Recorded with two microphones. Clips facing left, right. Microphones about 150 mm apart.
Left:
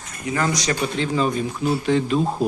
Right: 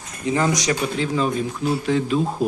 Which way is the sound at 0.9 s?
Centre (ahead or behind).